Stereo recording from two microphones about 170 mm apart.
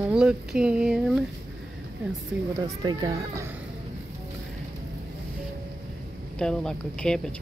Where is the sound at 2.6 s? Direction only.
20° right (ahead or behind).